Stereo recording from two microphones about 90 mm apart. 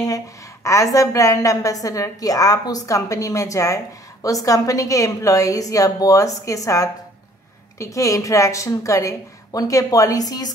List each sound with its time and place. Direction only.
0.7 s a woman's voice: 35° left (ahead or behind)